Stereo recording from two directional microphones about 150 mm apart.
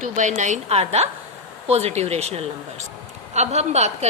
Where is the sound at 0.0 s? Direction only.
55° right (ahead or behind).